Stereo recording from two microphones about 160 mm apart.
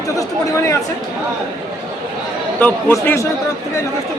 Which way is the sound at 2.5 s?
10° left (ahead or behind).